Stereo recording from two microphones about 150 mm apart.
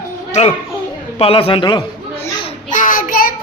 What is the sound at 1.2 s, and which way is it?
Speech, 35° left (ahead or behind).